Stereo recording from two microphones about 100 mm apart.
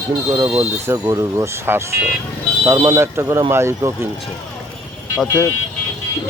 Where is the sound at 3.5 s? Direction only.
25° right (ahead or behind).